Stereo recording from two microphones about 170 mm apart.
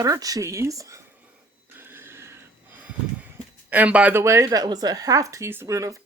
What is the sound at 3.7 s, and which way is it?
Speech, 10° right (ahead or behind).